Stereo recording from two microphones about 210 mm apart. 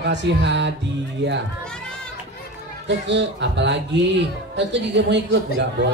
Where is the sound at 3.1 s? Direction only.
55° right (ahead or behind).